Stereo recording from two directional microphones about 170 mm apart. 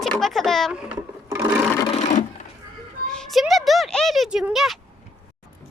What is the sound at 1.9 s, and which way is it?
Sewing machine, 45° left (ahead or behind).